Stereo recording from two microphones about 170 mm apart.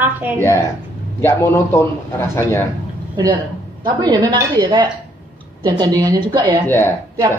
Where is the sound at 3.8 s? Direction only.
25° right (ahead or behind).